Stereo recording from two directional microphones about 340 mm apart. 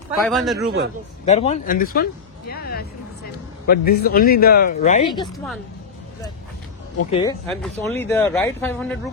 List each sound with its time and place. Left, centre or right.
0.3 s speech: centre
0.6 s a man's voice: right
1.2 s speech: centre
5.3 s speech: centre
7.1 s speech: centre
7.4 s speech: centre